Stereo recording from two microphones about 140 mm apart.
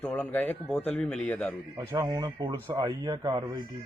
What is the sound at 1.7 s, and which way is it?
Speech, 25° right (ahead or behind).